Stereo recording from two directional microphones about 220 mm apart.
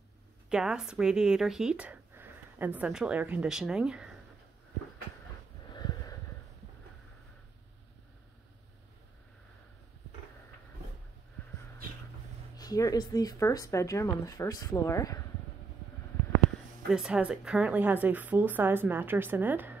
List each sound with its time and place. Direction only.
0.5 s speech: 5° right (ahead or behind)
5.7 s a sound: 20° left (ahead or behind)
12.5 s speech: 15° left (ahead or behind)
16.9 s a woman's voice: 5° right (ahead or behind)